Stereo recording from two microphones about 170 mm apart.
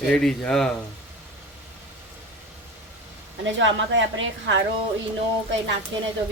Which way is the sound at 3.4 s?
90° right.